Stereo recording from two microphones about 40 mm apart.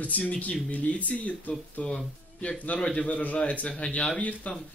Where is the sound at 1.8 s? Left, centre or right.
Left.